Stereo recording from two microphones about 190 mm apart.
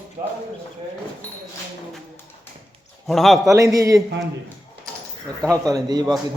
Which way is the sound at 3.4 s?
15° right (ahead or behind).